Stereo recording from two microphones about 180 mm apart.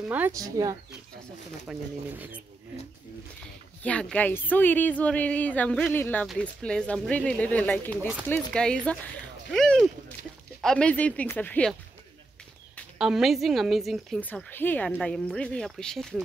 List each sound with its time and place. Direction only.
0.1 s speech: 15° right (ahead or behind)
1.7 s speech: 10° right (ahead or behind)
3.8 s speech: 5° left (ahead or behind)
13.0 s a woman's voice: centre (ahead or behind)